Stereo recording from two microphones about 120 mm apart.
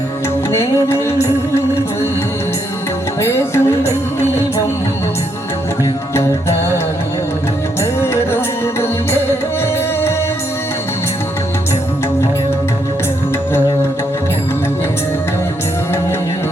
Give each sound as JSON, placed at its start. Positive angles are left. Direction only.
{"t": 0.5, "sound": "music", "side_deg": 20}
{"t": 3.2, "sound": "music", "side_deg": 20}
{"t": 7.8, "sound": "music", "side_deg": 20}